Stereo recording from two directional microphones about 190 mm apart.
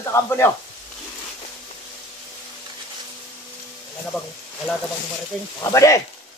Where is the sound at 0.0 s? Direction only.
15° left (ahead or behind).